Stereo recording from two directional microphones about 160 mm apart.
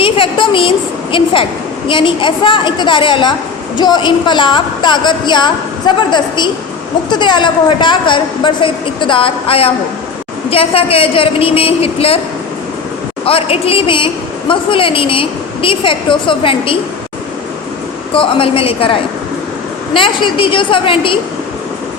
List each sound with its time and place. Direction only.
0.0 s a woman's voice: 30° left (ahead or behind)
13.2 s a woman's voice: 35° left (ahead or behind)
18.1 s a woman's voice: 35° left (ahead or behind)